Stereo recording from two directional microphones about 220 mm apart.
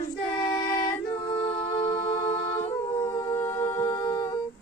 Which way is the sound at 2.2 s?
15° left (ahead or behind).